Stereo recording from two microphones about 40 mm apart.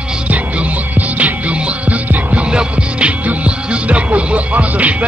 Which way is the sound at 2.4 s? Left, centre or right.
Right.